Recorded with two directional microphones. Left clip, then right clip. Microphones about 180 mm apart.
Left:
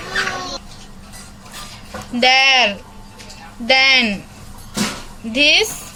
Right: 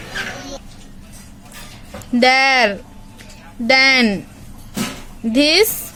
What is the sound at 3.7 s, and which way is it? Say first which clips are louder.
Speech: even; 50° right (ahead or behind).